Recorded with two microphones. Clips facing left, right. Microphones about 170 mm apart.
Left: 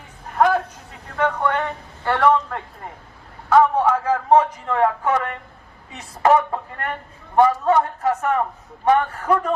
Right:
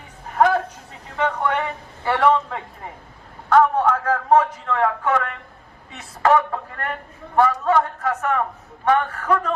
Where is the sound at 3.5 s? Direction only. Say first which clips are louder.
Left 1 dB; 10° left (ahead or behind).